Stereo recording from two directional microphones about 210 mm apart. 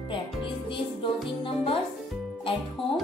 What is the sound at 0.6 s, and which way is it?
Music, 25° left (ahead or behind).